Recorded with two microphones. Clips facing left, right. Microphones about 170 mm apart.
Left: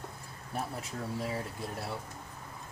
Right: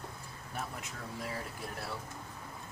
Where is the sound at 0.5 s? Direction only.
30° left (ahead or behind).